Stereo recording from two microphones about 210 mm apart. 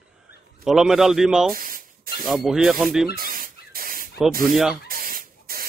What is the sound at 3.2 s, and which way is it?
Spray, 45° right (ahead or behind).